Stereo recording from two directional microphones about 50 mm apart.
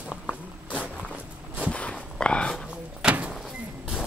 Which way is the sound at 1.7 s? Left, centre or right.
Left.